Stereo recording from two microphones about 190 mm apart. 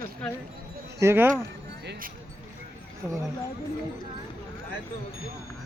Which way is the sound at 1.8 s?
65° right (ahead or behind).